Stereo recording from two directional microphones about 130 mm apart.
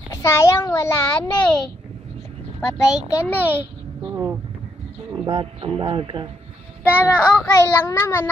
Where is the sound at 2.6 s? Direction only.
25° left (ahead or behind).